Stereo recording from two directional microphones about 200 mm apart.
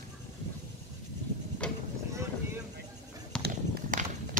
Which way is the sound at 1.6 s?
5° left (ahead or behind).